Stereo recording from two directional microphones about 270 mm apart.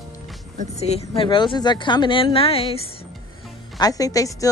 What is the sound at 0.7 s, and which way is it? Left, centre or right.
A woman's voice, left.